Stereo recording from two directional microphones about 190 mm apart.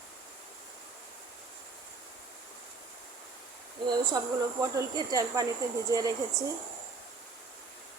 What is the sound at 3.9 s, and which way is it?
Speech, 20° right (ahead or behind).